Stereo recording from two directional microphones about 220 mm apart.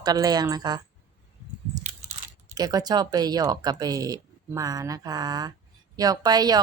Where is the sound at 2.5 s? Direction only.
15° right (ahead or behind).